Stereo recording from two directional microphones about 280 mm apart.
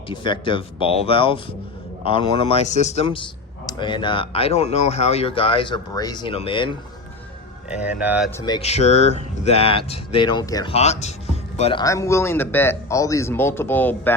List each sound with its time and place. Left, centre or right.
0.1 s speech: centre
7.7 s speech: centre
8.4 s a man's voice: centre